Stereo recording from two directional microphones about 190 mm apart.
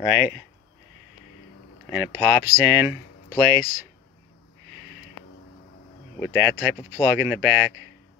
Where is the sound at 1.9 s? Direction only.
10° right (ahead or behind).